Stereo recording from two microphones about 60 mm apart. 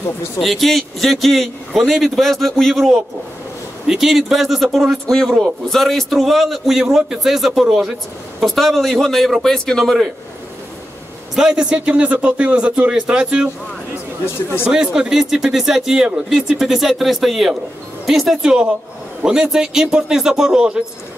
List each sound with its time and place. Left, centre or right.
0.4 s a man's voice: centre
11.3 s a man's voice: centre
14.2 s speech: left
14.7 s speech: centre